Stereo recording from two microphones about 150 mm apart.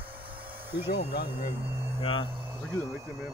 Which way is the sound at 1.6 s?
15° right (ahead or behind).